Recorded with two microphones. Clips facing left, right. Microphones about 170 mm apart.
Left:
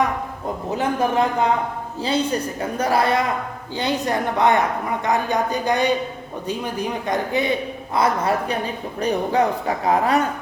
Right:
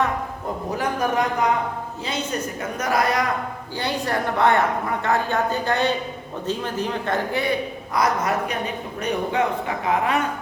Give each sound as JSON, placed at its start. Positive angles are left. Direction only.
{"t": 0.8, "sound": "a woman's voice", "side_deg": 25}
{"t": 7.9, "sound": "a man's voice", "side_deg": 30}